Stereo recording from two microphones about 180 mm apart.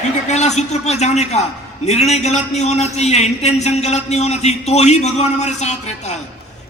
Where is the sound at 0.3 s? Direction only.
40° left (ahead or behind).